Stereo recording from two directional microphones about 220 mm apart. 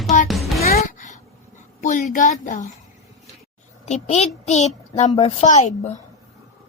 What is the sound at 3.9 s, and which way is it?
Speech, 30° left (ahead or behind).